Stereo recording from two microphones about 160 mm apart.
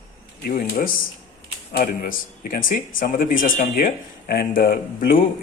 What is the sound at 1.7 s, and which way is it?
Speech, 60° left (ahead or behind).